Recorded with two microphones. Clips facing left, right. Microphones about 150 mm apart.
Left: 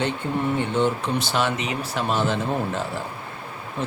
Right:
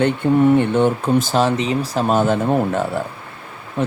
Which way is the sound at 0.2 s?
65° right (ahead or behind).